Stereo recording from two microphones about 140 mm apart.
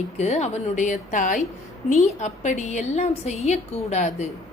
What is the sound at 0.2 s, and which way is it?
A woman's voice, 55° left (ahead or behind).